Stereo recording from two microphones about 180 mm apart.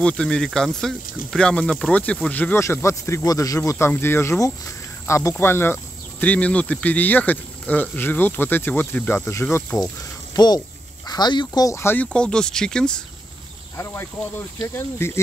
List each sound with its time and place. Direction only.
0.0 s speech: 5° left (ahead or behind)